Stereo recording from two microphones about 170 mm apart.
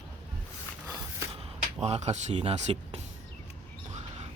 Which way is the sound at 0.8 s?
20° right (ahead or behind).